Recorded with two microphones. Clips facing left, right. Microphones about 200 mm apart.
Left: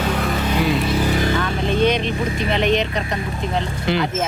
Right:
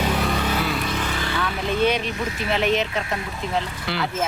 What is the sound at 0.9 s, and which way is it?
Vehicle, 35° left (ahead or behind).